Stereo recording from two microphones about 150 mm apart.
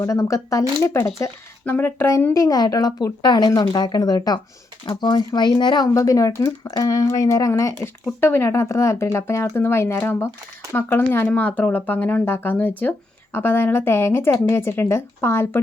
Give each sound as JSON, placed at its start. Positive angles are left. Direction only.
{"t": 0.0, "sound": "speech", "side_deg": 20}
{"t": 7.8, "sound": "a woman's voice", "side_deg": 10}